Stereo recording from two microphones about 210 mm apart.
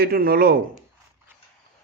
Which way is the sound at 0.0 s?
45° right (ahead or behind).